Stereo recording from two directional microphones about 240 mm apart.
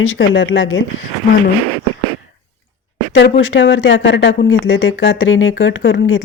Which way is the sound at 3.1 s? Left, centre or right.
Left.